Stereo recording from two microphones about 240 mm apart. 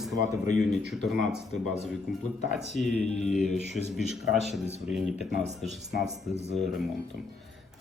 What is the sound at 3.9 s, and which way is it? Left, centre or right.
A man's voice, centre.